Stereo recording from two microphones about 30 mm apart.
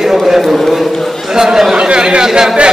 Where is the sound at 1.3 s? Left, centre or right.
Centre.